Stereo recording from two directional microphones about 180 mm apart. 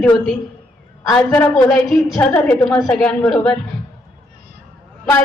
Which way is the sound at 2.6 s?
20° left (ahead or behind).